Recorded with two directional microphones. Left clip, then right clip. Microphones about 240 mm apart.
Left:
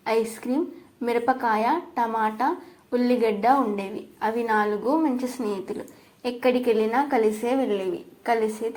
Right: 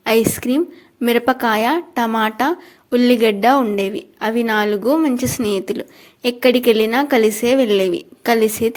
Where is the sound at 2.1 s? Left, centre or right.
Right.